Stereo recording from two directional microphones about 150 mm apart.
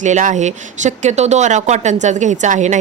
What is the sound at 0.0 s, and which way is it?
Speech, 55° right (ahead or behind).